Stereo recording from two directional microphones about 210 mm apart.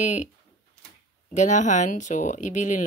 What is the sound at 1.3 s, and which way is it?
Speech, 35° left (ahead or behind).